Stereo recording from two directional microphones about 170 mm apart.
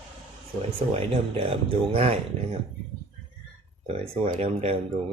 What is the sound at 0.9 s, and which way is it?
Speech, 35° right (ahead or behind).